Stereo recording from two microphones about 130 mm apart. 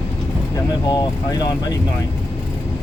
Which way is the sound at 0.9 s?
30° left (ahead or behind).